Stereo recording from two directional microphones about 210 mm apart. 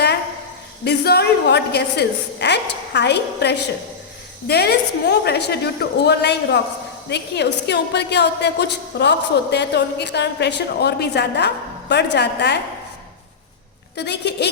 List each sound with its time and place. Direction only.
0.9 s a woman's voice: 50° left (ahead or behind)
13.9 s a woman's voice: 55° left (ahead or behind)